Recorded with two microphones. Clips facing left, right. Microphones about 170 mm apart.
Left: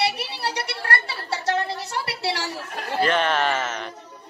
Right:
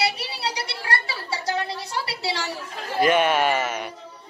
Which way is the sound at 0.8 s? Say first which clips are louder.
Even; 60° left (ahead or behind).